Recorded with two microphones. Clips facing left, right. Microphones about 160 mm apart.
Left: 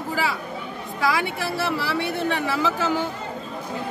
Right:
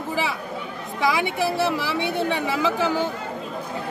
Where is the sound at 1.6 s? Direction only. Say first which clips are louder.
Right 2 dB; 15° right (ahead or behind).